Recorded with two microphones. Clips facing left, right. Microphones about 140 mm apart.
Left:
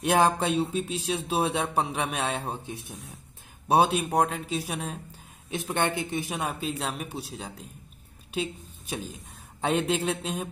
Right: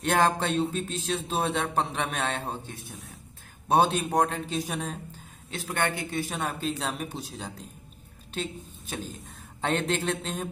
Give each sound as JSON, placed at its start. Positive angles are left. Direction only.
{"t": 0.0, "sound": "a man's voice", "side_deg": 10}
{"t": 5.5, "sound": "a man's voice", "side_deg": 20}